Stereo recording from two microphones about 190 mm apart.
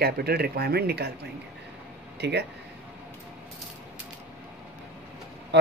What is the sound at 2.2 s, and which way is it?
Speech, 60° right (ahead or behind).